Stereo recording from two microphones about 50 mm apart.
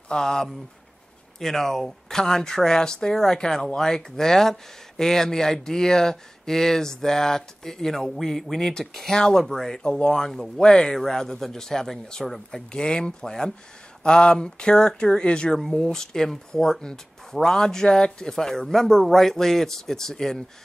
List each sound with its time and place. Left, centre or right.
0.1 s speech: centre
9.8 s speech: centre